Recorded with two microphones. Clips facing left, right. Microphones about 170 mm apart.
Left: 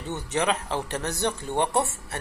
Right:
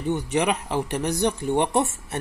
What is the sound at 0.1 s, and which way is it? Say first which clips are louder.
Speech: right 3 dB; 15° right (ahead or behind).